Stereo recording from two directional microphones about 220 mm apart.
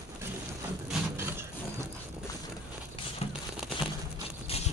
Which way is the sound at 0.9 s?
10° right (ahead or behind).